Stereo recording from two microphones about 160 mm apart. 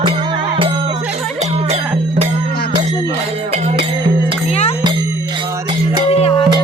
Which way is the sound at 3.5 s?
40° right (ahead or behind).